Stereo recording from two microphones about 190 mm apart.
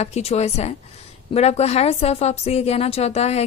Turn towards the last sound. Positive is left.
turn(degrees=35)  # may be behind; listen again after turning